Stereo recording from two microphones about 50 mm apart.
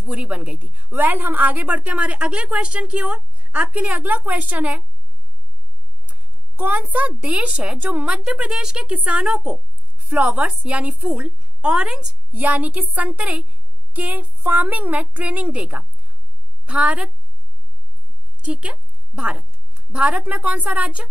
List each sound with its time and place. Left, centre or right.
0.0 s a woman's voice: right
6.0 s a woman's voice: right
8.2 s speech: centre
9.9 s a woman's voice: right
11.7 s a woman's voice: centre
12.3 s a woman's voice: right
18.4 s a sound: right
19.7 s speech: right